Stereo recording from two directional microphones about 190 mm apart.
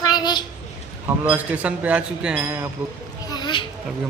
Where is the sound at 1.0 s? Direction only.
10° right (ahead or behind).